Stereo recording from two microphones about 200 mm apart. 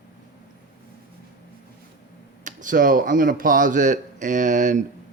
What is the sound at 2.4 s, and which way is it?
Speech, 40° right (ahead or behind).